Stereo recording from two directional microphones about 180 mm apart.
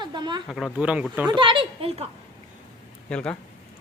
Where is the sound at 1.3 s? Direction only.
25° right (ahead or behind).